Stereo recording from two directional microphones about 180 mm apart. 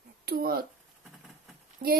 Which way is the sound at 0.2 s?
55° right (ahead or behind).